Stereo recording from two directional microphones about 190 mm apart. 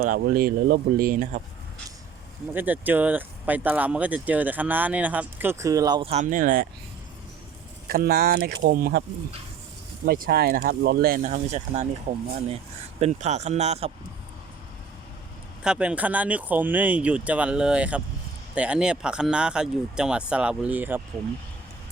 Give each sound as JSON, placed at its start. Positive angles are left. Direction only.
{"t": 0.0, "sound": "speech", "side_deg": -50}
{"t": 2.5, "sound": "speech", "side_deg": -10}
{"t": 6.1, "sound": "speech", "side_deg": -40}
{"t": 7.9, "sound": "speech", "side_deg": -55}
{"t": 10.1, "sound": "speech", "side_deg": -50}
{"t": 15.6, "sound": "speech", "side_deg": -5}